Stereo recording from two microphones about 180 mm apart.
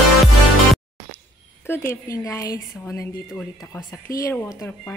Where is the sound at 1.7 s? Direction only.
10° left (ahead or behind).